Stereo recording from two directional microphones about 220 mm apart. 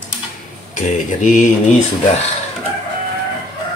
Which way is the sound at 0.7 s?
35° left (ahead or behind).